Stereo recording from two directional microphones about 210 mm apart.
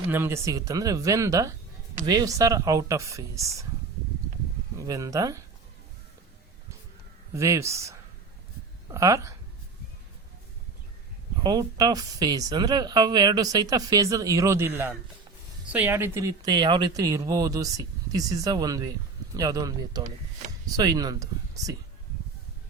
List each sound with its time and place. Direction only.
0.1 s speech: 10° right (ahead or behind)
4.8 s speech: 15° right (ahead or behind)
7.3 s speech: 15° right (ahead or behind)
11.4 s speech: 20° right (ahead or behind)